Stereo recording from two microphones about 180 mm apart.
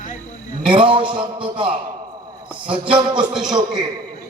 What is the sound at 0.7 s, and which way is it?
Speech, 30° right (ahead or behind).